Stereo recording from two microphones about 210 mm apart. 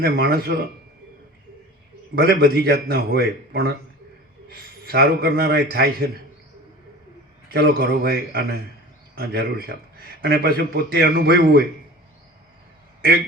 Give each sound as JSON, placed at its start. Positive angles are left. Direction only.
{"t": 0.0, "sound": "speech", "side_deg": -45}
{"t": 2.1, "sound": "a man's voice", "side_deg": -50}
{"t": 7.5, "sound": "speech", "side_deg": -50}